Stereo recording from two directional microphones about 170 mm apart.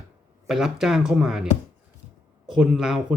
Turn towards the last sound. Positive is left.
turn(degrees=-5)  # may be behind; listen again after turning